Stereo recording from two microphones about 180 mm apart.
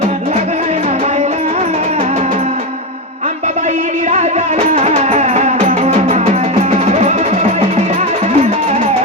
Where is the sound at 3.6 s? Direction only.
40° right (ahead or behind).